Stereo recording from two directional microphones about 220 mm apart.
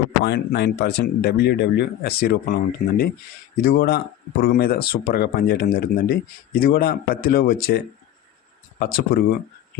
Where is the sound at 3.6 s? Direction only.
45° left (ahead or behind).